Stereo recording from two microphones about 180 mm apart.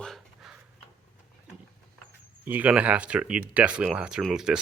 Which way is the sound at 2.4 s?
10° right (ahead or behind).